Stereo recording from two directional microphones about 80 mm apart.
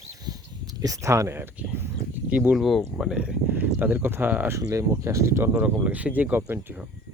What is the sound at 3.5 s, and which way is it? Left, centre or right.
Speech, right.